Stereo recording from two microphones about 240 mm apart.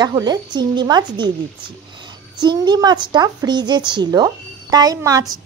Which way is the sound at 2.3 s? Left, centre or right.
Centre.